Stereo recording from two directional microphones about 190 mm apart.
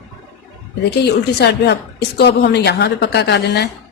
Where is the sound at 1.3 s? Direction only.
60° left (ahead or behind).